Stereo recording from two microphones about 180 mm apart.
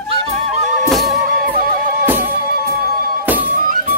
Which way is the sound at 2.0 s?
10° right (ahead or behind).